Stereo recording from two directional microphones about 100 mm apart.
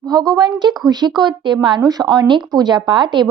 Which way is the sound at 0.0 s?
40° right (ahead or behind).